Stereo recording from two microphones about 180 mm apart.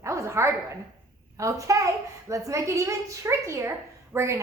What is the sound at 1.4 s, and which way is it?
A woman's voice, 15° right (ahead or behind).